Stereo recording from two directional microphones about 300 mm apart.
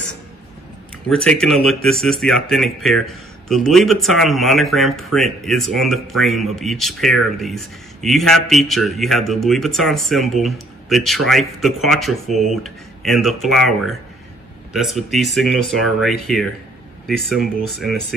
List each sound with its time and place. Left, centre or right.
1.0 s speech: centre
17.6 s speech: centre